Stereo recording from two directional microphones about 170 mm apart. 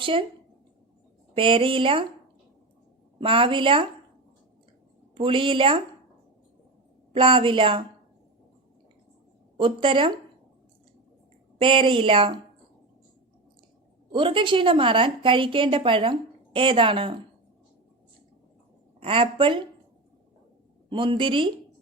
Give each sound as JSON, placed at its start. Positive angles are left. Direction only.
{"t": 0.0, "sound": "a woman's voice", "side_deg": -30}
{"t": 1.4, "sound": "a woman's voice", "side_deg": -30}
{"t": 3.2, "sound": "a woman's voice", "side_deg": -30}
{"t": 5.1, "sound": "a woman's voice", "side_deg": -30}
{"t": 7.1, "sound": "a woman's voice", "side_deg": -30}
{"t": 9.6, "sound": "a woman's voice", "side_deg": -30}
{"t": 11.6, "sound": "a woman's voice", "side_deg": -30}
{"t": 14.1, "sound": "a woman's voice", "side_deg": -30}
{"t": 18.9, "sound": "a woman's voice", "side_deg": -35}
{"t": 20.9, "sound": "speech", "side_deg": -30}